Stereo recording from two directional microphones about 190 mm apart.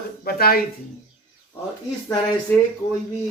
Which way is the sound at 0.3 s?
55° left (ahead or behind).